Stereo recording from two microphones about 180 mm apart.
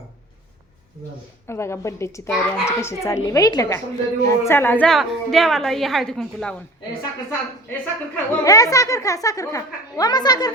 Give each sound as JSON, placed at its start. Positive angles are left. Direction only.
{"t": 1.5, "sound": "a child's voice", "side_deg": 15}